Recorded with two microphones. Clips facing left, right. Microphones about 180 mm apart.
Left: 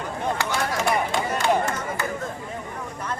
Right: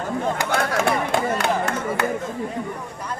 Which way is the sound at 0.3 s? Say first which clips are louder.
Right 3 dB; 55° right (ahead or behind).